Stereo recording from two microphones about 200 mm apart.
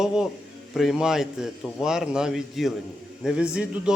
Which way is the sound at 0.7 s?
Centre (ahead or behind).